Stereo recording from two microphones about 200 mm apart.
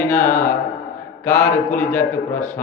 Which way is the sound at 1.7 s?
5° left (ahead or behind).